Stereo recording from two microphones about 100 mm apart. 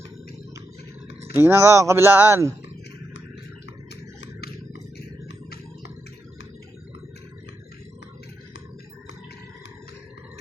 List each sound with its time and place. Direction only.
1.2 s speech: 25° right (ahead or behind)